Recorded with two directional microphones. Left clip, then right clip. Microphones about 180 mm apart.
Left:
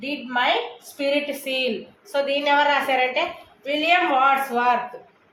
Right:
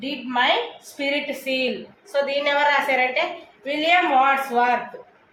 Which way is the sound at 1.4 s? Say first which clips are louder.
Right 1 dB; 30° left (ahead or behind).